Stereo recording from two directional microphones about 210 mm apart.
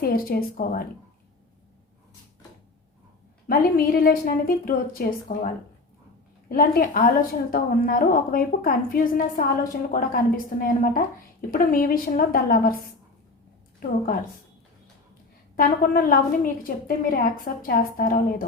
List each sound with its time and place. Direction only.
0.0 s a woman's voice: 45° left (ahead or behind)
3.4 s a woman's voice: 45° left (ahead or behind)
6.5 s a woman's voice: 45° left (ahead or behind)
13.7 s a woman's voice: 45° left (ahead or behind)
15.5 s a woman's voice: 40° left (ahead or behind)